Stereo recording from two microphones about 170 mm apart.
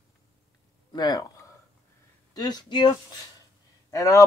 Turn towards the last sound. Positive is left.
turn(degrees=20)  # may be behind; listen again after turning